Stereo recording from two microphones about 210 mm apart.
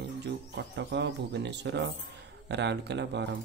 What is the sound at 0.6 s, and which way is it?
Speech, 55° right (ahead or behind).